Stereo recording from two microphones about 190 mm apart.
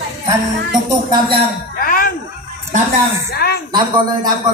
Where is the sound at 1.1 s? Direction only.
25° right (ahead or behind).